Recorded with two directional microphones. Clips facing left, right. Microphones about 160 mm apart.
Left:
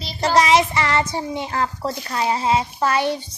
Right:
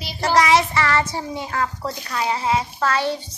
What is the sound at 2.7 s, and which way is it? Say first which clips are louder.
Speech: left 2 dB; 15° left (ahead or behind).